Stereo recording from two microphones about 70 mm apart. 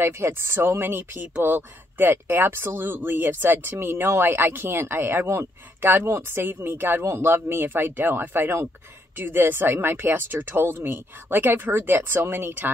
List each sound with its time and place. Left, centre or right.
0.0 s speech: right